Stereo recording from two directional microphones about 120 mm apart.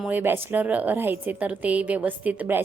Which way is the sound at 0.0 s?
15° right (ahead or behind).